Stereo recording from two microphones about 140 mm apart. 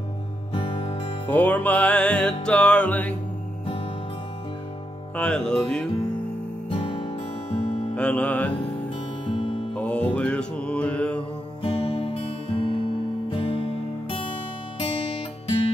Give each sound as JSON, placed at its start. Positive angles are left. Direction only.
{"t": 0.5, "sound": "music", "side_deg": 40}
{"t": 1.2, "sound": "music", "side_deg": 10}
{"t": 5.1, "sound": "music", "side_deg": 5}
{"t": 6.7, "sound": "music", "side_deg": 40}
{"t": 7.9, "sound": "music", "side_deg": 10}
{"t": 9.2, "sound": "music", "side_deg": 40}
{"t": 9.8, "sound": "music", "side_deg": 10}
{"t": 11.6, "sound": "music", "side_deg": 35}